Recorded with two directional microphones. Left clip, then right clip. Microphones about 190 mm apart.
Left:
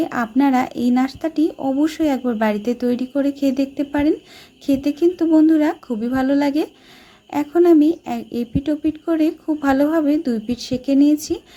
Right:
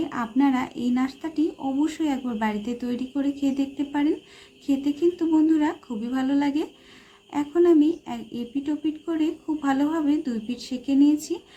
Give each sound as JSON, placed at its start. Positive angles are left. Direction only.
{"t": 0.0, "sound": "speech", "side_deg": 40}